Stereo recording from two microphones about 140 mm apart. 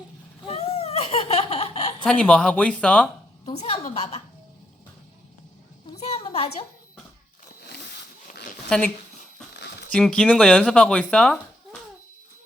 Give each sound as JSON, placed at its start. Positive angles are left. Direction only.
{"t": 0.4, "sound": "baby laughter", "side_deg": 45}
{"t": 2.0, "sound": "speech", "side_deg": 10}
{"t": 3.5, "sound": "a woman's voice", "side_deg": 50}
{"t": 6.0, "sound": "a sound", "side_deg": 45}
{"t": 9.9, "sound": "speech", "side_deg": 5}